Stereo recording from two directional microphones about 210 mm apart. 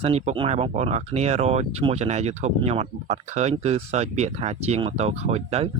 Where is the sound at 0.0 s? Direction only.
30° right (ahead or behind).